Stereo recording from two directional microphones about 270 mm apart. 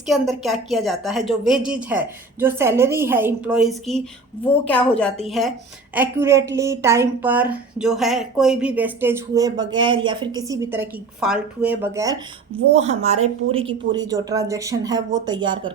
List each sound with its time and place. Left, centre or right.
0.1 s a woman's voice: centre
12.7 s a woman's voice: right